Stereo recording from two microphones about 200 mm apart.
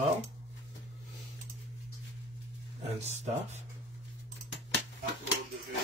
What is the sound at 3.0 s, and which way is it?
Speech, 35° right (ahead or behind).